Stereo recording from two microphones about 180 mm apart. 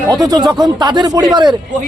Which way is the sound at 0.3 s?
25° right (ahead or behind).